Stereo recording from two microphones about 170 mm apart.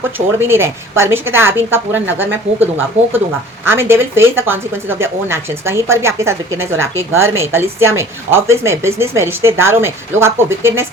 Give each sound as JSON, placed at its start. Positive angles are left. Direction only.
{"t": 0.3, "sound": "speech", "side_deg": -15}